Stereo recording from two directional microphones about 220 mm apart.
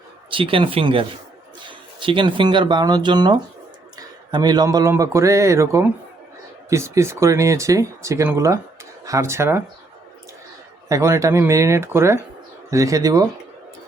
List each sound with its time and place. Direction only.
0.3 s speech: 25° right (ahead or behind)
10.8 s speech: 15° right (ahead or behind)